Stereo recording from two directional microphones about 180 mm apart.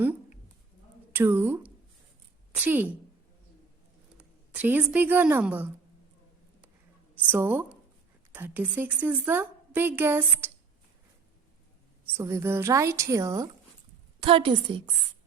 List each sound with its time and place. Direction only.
1.1 s a woman's voice: 10° right (ahead or behind)
4.2 s a woman's voice: 10° right (ahead or behind)
7.2 s a woman's voice: 10° right (ahead or behind)
12.1 s a woman's voice: 15° right (ahead or behind)
14.2 s a woman's voice: 30° right (ahead or behind)